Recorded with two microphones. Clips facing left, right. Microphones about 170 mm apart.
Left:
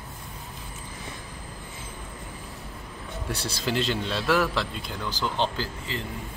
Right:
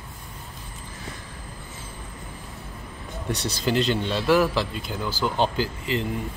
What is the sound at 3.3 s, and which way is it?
A man's voice, centre (ahead or behind).